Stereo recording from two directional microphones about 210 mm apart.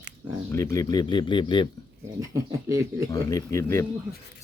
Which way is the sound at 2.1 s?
15° right (ahead or behind).